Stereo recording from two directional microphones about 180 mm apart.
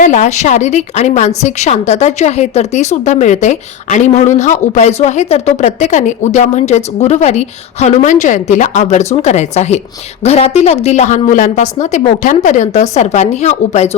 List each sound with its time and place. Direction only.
0.0 s a woman's voice: 40° left (ahead or behind)